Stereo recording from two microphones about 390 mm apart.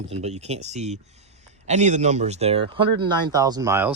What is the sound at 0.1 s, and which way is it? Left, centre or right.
Speech, centre.